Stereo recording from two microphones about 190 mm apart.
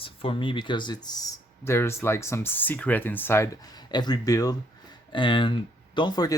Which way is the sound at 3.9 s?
20° left (ahead or behind).